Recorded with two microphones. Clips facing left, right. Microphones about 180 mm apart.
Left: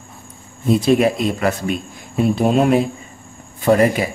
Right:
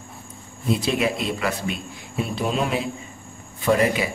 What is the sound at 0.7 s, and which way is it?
Speech, 45° left (ahead or behind).